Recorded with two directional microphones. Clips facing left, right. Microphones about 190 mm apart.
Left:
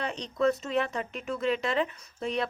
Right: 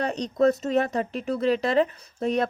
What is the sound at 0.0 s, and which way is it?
Speech, 40° right (ahead or behind).